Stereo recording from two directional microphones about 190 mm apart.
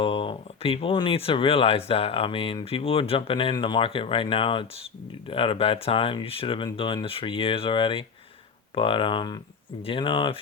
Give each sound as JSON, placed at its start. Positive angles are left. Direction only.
{"t": 0.0, "sound": "speech", "side_deg": 30}